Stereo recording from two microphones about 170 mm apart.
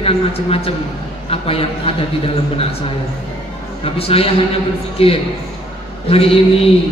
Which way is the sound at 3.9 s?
35° left (ahead or behind).